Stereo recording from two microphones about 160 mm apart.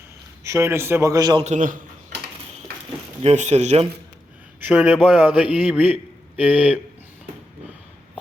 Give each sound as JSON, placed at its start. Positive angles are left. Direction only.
{"t": 0.4, "sound": "a man's voice", "side_deg": -15}
{"t": 1.5, "sound": "speech", "side_deg": -55}
{"t": 3.2, "sound": "speech", "side_deg": -45}
{"t": 4.6, "sound": "a man's voice", "side_deg": -5}